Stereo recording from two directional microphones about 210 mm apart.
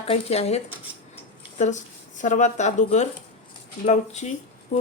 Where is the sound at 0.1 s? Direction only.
30° left (ahead or behind).